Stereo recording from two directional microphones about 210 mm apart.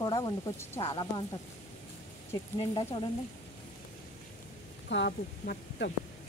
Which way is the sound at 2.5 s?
25° left (ahead or behind).